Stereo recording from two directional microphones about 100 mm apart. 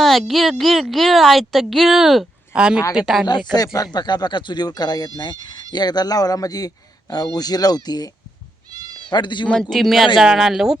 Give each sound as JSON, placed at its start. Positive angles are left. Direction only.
{"t": 0.0, "sound": "a woman's voice", "side_deg": 0}
{"t": 3.5, "sound": "a man's voice", "side_deg": 40}
{"t": 9.5, "sound": "speech", "side_deg": 5}